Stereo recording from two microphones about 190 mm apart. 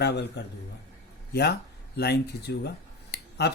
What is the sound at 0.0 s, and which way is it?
A man's voice, 60° left (ahead or behind).